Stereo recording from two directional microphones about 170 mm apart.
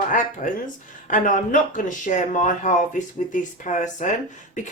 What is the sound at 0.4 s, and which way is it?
Speech, 50° left (ahead or behind).